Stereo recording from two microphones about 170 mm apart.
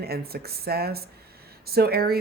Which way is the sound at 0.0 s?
65° right (ahead or behind).